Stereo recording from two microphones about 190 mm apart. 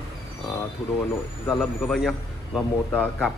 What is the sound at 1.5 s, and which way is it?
A man's voice, 5° left (ahead or behind).